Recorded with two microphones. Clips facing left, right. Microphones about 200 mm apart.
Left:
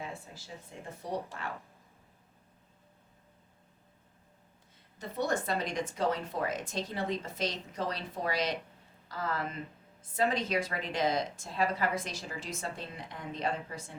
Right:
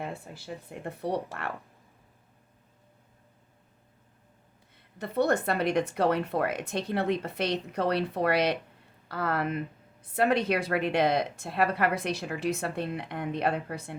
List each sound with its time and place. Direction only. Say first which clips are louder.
0.0 s a woman's voice: right 5 dB; 60° right (ahead or behind)
4.9 s a woman's voice: right 6 dB; 60° right (ahead or behind)